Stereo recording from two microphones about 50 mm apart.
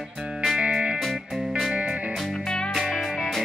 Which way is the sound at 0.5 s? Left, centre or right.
Centre.